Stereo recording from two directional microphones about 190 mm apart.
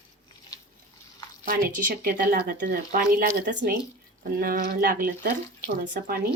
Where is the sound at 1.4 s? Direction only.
50° right (ahead or behind).